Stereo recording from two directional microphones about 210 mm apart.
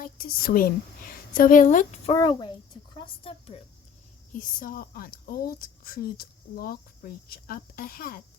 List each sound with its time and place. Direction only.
0.0 s a woman's voice: 45° left (ahead or behind); by 3.6 s 25° left (ahead or behind)
4.4 s speech: 40° left (ahead or behind)